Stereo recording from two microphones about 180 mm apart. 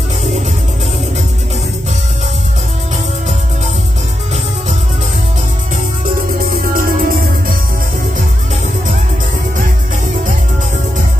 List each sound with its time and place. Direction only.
6.7 s music: 50° right (ahead or behind)